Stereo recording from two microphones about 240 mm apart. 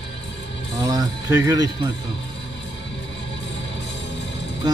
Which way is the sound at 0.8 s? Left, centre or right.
Centre.